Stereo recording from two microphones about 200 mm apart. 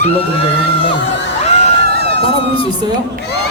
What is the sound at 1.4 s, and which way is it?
Whoop, 35° left (ahead or behind).